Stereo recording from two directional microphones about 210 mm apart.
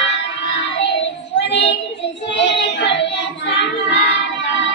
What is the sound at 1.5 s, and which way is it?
Child singing, 60° left (ahead or behind).